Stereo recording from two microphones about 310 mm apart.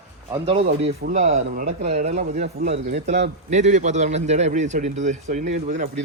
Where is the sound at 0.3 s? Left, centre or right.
Centre.